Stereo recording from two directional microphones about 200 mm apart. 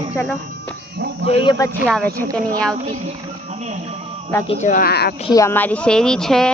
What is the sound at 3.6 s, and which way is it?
Music, 35° right (ahead or behind).